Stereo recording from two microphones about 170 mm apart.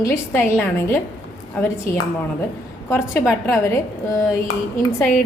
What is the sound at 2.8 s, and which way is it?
A woman's voice, 15° left (ahead or behind).